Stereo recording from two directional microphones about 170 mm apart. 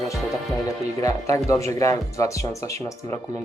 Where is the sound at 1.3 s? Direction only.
20° left (ahead or behind).